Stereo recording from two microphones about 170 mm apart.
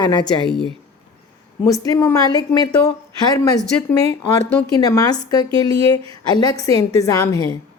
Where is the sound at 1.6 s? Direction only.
20° left (ahead or behind).